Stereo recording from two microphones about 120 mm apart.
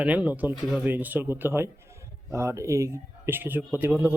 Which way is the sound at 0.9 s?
15° right (ahead or behind).